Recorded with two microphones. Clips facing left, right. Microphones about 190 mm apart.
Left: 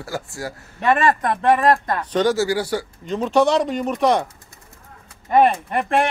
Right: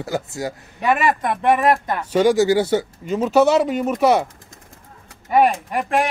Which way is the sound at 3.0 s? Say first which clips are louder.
Right 1 dB; 5° right (ahead or behind).